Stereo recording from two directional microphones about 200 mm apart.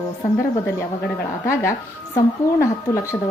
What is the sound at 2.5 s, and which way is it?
Speech, 15° left (ahead or behind).